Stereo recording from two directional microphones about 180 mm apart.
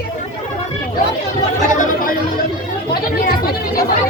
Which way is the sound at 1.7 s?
45° left (ahead or behind).